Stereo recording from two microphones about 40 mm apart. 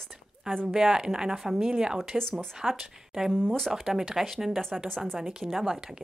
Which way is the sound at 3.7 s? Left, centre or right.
Centre.